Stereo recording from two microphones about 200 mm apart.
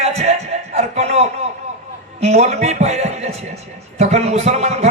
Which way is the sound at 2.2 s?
30° right (ahead or behind).